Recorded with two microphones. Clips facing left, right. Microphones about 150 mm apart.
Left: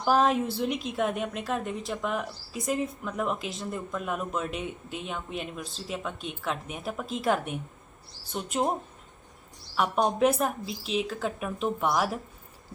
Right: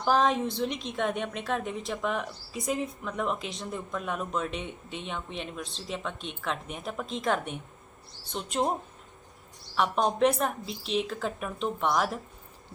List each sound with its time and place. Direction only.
0.0 s a woman's voice: 5° left (ahead or behind)
9.7 s a woman's voice: 5° left (ahead or behind)